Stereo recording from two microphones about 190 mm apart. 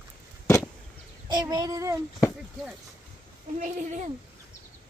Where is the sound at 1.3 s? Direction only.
20° right (ahead or behind).